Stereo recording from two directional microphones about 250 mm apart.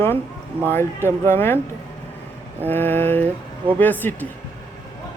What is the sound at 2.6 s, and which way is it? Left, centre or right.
Speech, centre.